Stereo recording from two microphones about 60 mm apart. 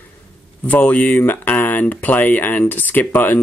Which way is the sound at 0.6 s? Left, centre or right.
Left.